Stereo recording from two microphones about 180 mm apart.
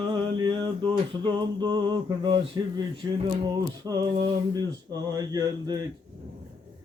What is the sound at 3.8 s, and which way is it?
Male singing, 20° right (ahead or behind).